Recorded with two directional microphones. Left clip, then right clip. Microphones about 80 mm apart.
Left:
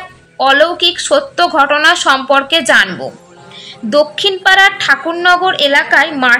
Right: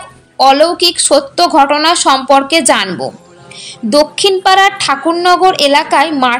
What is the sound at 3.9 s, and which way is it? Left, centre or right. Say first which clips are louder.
A woman's voice: right 2 dB; right.